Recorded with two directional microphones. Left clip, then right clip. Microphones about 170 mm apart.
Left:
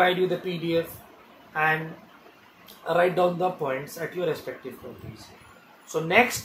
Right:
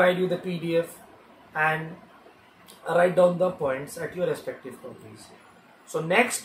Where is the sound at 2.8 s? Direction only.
15° left (ahead or behind).